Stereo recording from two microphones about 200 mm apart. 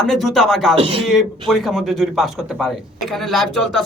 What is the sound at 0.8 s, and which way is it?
Speech, 25° right (ahead or behind).